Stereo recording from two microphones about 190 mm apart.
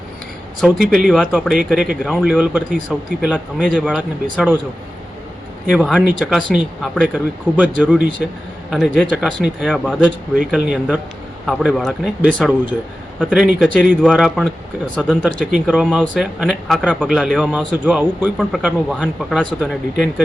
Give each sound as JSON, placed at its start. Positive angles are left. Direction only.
{"t": 0.6, "sound": "speech", "side_deg": -5}
{"t": 5.7, "sound": "speech", "side_deg": -5}